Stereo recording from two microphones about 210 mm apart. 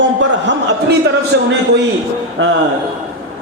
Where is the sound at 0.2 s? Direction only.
55° right (ahead or behind).